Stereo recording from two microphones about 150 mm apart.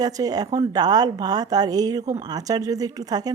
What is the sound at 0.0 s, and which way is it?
Speech, 25° right (ahead or behind).